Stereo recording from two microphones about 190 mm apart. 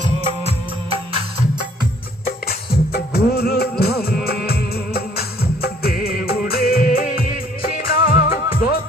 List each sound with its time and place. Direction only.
2.2 s music: 55° left (ahead or behind)